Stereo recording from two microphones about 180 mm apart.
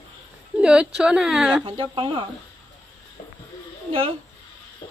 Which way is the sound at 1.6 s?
30° right (ahead or behind).